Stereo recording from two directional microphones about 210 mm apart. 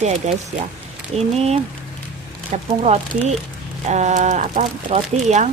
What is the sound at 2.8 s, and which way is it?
Speech, 30° right (ahead or behind).